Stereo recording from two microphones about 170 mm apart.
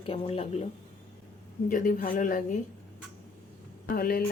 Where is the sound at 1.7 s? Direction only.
50° left (ahead or behind).